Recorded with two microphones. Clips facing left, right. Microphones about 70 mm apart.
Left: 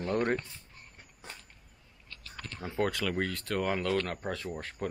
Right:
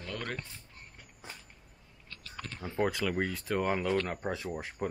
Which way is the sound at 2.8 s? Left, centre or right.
Centre.